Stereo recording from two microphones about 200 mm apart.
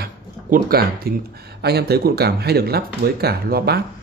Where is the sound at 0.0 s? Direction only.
50° right (ahead or behind).